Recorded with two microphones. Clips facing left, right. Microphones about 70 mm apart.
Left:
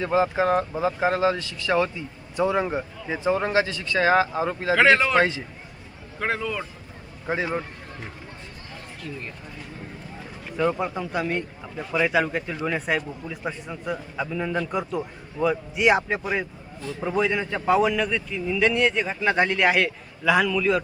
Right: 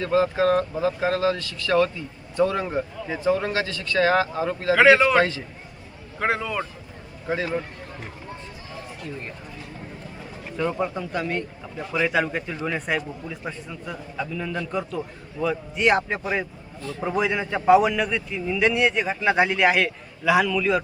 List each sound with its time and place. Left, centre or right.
0.0 s speech: left
4.8 s a man's voice: centre
5.1 s a man's voice: centre
6.1 s speech: centre
7.3 s speech: left
10.6 s a man's voice: centre
11.8 s a man's voice: centre
13.5 s a man's voice: centre